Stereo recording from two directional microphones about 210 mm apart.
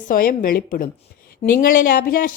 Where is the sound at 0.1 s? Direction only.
45° left (ahead or behind).